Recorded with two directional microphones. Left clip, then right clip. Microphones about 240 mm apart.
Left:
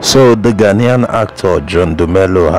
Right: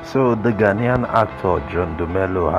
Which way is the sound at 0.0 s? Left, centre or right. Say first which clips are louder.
Left 11 dB; left.